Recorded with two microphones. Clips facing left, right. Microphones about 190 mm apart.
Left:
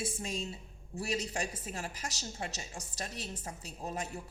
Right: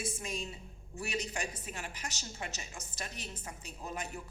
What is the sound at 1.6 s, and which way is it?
A woman's voice, 40° left (ahead or behind).